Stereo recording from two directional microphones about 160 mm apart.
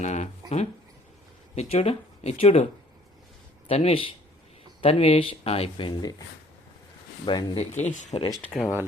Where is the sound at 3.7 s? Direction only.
35° left (ahead or behind).